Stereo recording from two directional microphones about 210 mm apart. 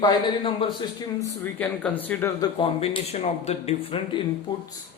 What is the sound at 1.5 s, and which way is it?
Speech, 5° left (ahead or behind).